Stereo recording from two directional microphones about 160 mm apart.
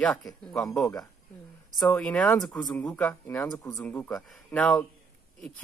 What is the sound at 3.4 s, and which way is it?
Speech, 20° left (ahead or behind).